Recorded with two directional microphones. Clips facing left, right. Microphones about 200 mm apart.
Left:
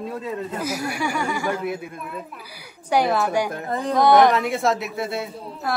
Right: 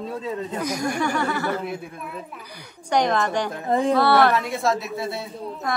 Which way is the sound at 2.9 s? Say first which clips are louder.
Left 1 dB; 5° left (ahead or behind).